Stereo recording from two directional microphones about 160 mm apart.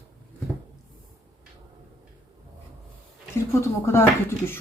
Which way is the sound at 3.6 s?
15° left (ahead or behind).